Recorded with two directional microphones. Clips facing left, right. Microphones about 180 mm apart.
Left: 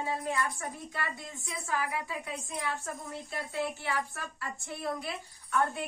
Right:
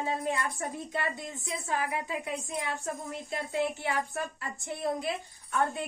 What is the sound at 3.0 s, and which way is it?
A woman's voice, 20° right (ahead or behind).